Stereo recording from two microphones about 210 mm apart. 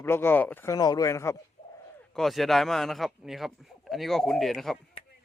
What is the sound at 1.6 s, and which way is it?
Bird, 35° left (ahead or behind).